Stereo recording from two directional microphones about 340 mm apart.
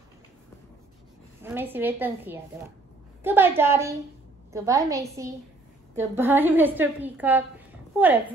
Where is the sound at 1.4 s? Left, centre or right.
Centre.